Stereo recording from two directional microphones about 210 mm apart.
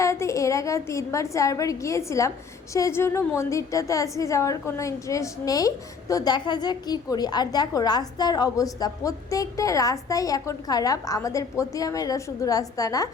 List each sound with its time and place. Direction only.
0.0 s a woman's voice: 15° left (ahead or behind)